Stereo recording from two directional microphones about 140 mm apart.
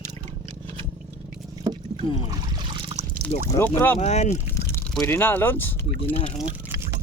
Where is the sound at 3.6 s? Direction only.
20° left (ahead or behind).